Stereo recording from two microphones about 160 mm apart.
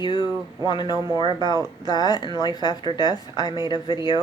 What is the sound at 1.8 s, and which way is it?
A woman's voice, 25° left (ahead or behind).